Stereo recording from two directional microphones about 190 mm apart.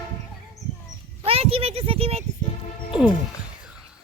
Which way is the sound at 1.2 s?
30° right (ahead or behind).